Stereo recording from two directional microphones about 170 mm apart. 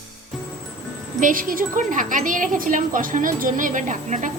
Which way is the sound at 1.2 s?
55° right (ahead or behind).